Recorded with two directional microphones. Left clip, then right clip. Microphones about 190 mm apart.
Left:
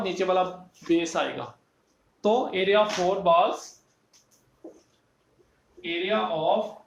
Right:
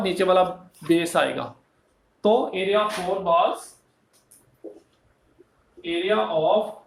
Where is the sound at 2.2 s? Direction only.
20° right (ahead or behind).